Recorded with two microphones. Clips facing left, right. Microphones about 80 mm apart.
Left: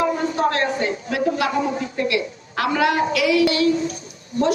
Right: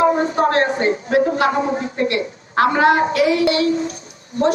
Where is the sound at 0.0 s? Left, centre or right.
Right.